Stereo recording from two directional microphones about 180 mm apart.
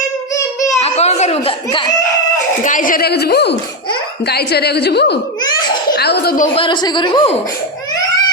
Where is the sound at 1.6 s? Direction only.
25° left (ahead or behind).